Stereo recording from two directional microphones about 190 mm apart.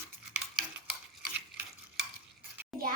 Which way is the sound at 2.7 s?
Centre (ahead or behind).